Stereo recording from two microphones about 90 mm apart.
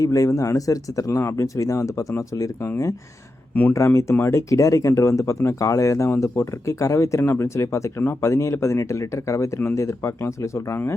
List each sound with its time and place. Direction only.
0.0 s speech: 35° left (ahead or behind)
3.5 s speech: 20° left (ahead or behind)
3.8 s speech: 30° left (ahead or behind)